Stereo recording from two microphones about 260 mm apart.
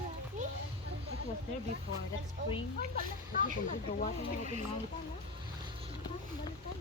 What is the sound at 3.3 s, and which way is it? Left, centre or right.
Speech, left.